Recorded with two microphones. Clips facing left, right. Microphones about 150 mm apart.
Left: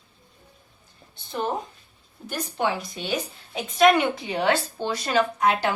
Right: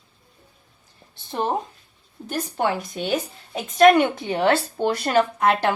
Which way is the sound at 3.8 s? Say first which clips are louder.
Right 4 dB; 45° right (ahead or behind).